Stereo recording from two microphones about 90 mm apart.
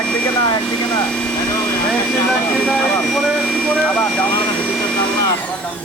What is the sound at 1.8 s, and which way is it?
Speech, 10° left (ahead or behind).